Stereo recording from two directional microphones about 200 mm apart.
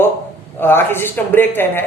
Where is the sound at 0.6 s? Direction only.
10° left (ahead or behind).